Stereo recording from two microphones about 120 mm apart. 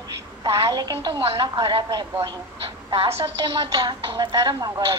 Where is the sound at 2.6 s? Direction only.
50° right (ahead or behind).